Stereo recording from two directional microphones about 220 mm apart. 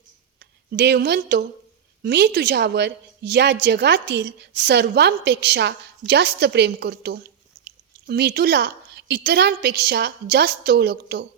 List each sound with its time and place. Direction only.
0.7 s a woman's voice: 45° right (ahead or behind)